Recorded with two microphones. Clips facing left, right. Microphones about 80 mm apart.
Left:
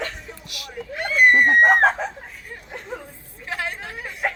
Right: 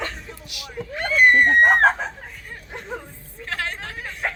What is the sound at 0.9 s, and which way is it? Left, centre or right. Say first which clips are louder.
Speech: even; centre.